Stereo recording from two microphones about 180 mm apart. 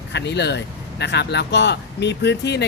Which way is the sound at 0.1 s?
75° left (ahead or behind).